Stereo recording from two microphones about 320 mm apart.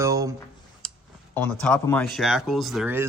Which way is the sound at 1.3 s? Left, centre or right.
Centre.